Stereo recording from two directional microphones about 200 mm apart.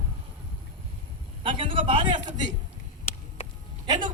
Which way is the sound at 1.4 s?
25° right (ahead or behind).